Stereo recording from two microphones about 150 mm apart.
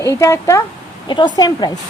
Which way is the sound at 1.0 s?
30° left (ahead or behind).